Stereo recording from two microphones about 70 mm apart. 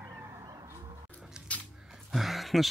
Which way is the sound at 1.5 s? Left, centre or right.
Centre.